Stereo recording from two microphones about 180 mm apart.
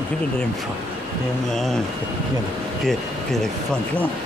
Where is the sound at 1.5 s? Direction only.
Centre (ahead or behind).